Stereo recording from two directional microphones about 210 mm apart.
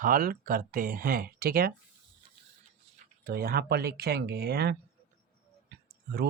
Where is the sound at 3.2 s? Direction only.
45° right (ahead or behind).